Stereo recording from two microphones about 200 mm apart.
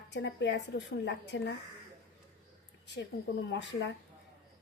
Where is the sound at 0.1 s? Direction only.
60° left (ahead or behind).